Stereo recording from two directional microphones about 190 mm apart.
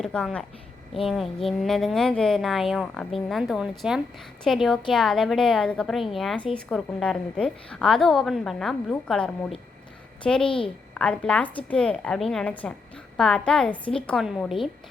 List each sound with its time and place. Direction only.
0.0 s a woman's voice: 5° left (ahead or behind)
10.4 s a woman's voice: 25° left (ahead or behind)
10.9 s speech: 5° left (ahead or behind)